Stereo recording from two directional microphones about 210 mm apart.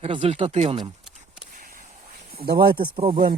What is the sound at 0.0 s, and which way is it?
Speech, 25° right (ahead or behind).